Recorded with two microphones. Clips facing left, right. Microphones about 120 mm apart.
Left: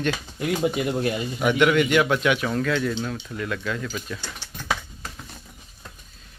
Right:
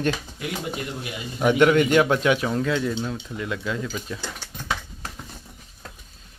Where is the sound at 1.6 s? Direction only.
35° right (ahead or behind); by 3.9 s 20° right (ahead or behind).